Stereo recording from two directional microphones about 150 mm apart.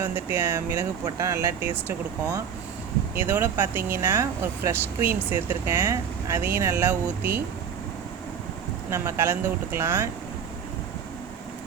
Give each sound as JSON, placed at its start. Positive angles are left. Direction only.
{"t": 0.0, "sound": "speech", "side_deg": -15}
{"t": 8.9, "sound": "speech", "side_deg": -15}